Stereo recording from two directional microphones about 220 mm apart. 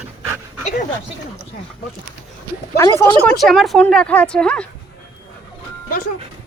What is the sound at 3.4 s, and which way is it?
Speech, centre (ahead or behind).